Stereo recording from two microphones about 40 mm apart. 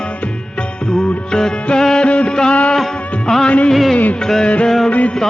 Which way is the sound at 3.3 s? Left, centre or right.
Centre.